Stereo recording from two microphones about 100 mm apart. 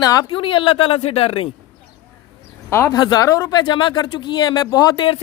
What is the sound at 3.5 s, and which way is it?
Speech, 50° left (ahead or behind).